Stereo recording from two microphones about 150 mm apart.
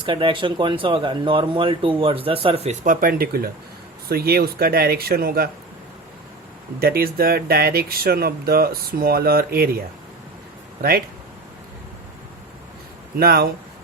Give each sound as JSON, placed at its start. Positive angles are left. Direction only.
{"t": 0.0, "sound": "speech", "side_deg": -35}
{"t": 2.8, "sound": "speech", "side_deg": -65}
{"t": 6.7, "sound": "speech", "side_deg": -90}
{"t": 13.1, "sound": "speech", "side_deg": -90}